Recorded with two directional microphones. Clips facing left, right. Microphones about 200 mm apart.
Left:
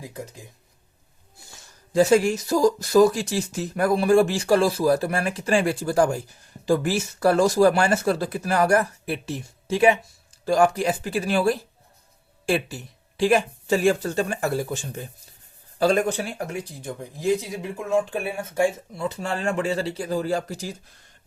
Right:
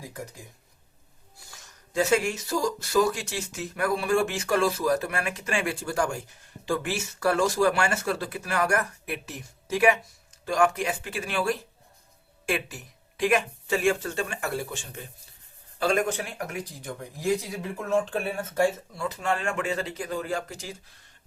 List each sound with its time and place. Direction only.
1.4 s speech: 25° left (ahead or behind)
19.0 s speech: 30° left (ahead or behind)